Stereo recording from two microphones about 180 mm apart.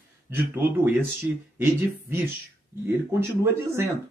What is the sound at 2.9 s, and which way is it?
Speech, 10° right (ahead or behind).